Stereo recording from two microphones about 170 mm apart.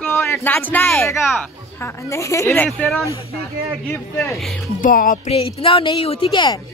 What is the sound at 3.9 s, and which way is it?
Speech, 15° left (ahead or behind).